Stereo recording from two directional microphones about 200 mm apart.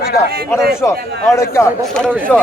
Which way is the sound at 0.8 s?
15° left (ahead or behind).